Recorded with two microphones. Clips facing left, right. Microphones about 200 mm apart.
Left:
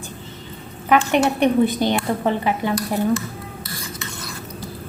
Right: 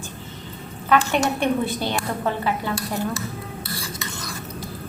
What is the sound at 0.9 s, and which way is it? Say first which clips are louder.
A woman's voice: left 3 dB; 15° left (ahead or behind).